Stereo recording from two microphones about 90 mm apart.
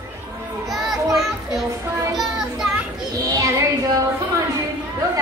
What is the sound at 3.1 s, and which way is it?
Child singing, 40° right (ahead or behind).